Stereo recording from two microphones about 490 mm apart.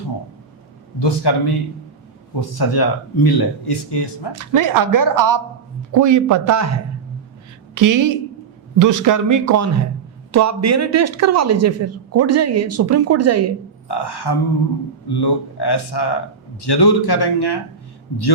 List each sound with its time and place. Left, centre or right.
0.9 s speech: left
4.3 s speech: right
13.8 s speech: left